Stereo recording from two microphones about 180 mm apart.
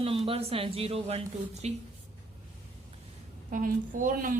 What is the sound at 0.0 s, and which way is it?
A woman's voice, 30° right (ahead or behind).